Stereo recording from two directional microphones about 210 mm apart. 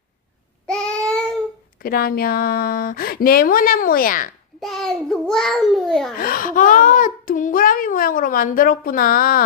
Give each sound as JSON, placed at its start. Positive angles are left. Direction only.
{"t": 0.7, "sound": "child singing", "side_deg": 5}
{"t": 1.8, "sound": "speech", "side_deg": 45}
{"t": 4.6, "sound": "a child's voice", "side_deg": 0}
{"t": 6.1, "sound": "a child's voice", "side_deg": 45}